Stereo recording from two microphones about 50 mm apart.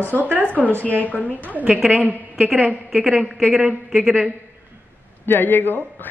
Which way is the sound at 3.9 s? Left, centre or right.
Centre.